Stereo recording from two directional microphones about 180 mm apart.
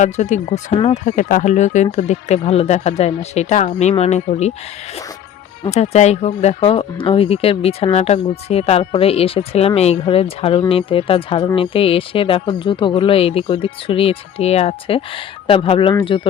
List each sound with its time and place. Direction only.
0.0 s speech: 40° left (ahead or behind)
1.0 s speech: 45° left (ahead or behind)
5.7 s speech: 35° left (ahead or behind)